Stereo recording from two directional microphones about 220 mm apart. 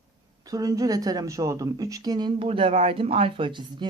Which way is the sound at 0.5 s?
15° right (ahead or behind).